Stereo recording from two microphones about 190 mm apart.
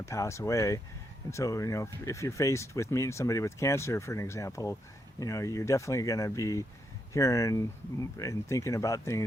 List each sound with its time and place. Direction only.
0.0 s speech: 15° left (ahead or behind)